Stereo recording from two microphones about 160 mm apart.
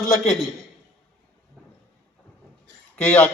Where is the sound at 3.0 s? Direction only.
10° left (ahead or behind).